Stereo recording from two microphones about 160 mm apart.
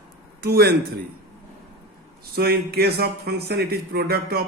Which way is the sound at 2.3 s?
75° right (ahead or behind).